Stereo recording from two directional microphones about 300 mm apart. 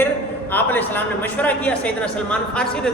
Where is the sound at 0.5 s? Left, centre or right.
Centre.